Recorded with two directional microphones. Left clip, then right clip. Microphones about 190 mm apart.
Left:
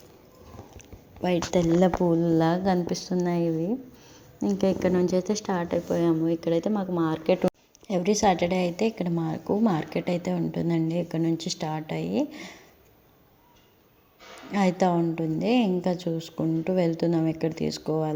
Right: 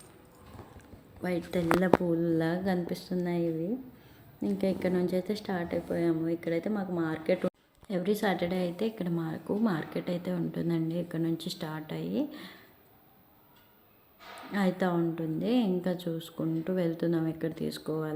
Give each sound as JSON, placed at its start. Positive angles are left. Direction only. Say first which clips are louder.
{"t": 1.2, "sound": "a woman's voice", "louder": "left 7 dB", "side_deg": 30}
{"t": 2.9, "sound": "a woman's voice", "louder": "left 6 dB", "side_deg": 0}
{"t": 3.2, "sound": "a woman's voice", "louder": "left 5 dB", "side_deg": 25}
{"t": 14.5, "sound": "a woman's voice", "louder": "left 6 dB", "side_deg": 20}